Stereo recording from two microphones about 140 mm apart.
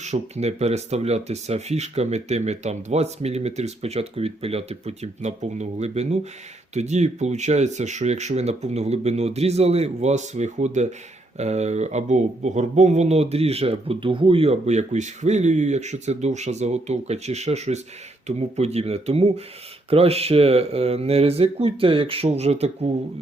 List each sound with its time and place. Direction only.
0.0 s speech: 50° right (ahead or behind)